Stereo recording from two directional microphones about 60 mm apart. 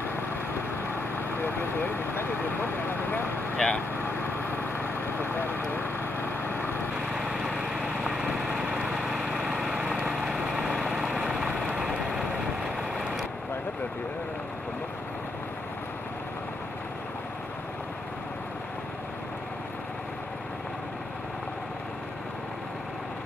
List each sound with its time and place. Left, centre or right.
1.1 s speech: left
3.5 s speech: centre
4.0 s vehicle: left
7.2 s vehicle: centre